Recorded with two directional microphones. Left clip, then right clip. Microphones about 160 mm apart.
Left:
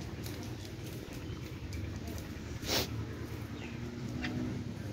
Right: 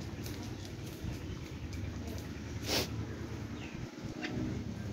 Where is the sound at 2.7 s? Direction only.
15° right (ahead or behind).